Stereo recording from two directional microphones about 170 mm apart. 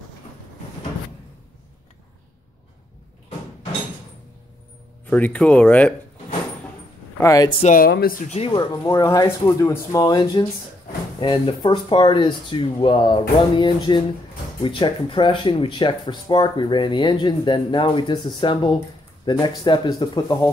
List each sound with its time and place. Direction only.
5.1 s speech: 10° left (ahead or behind)
7.2 s speech: 20° left (ahead or behind)
7.6 s speech: 55° left (ahead or behind)
8.5 s speech: 30° left (ahead or behind)